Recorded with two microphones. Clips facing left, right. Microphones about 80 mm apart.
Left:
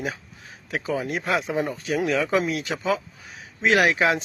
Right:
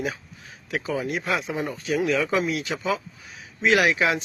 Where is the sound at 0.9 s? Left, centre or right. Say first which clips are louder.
Left 1 dB; left.